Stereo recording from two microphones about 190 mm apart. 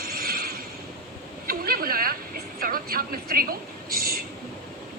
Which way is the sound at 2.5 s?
50° right (ahead or behind).